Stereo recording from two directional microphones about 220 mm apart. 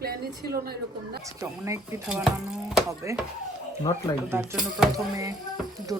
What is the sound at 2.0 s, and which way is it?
Speech, centre (ahead or behind).